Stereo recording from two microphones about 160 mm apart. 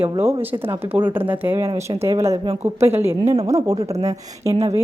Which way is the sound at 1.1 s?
10° right (ahead or behind).